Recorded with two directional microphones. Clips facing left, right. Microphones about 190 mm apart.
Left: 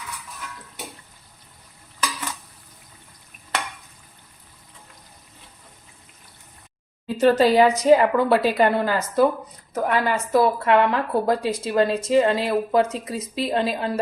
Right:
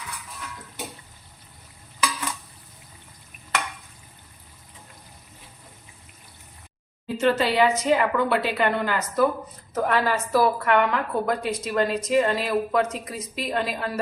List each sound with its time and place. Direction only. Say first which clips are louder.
7.2 s a woman's voice: left 5 dB; 35° left (ahead or behind)
9.7 s a woman's voice: left 1 dB; 20° left (ahead or behind)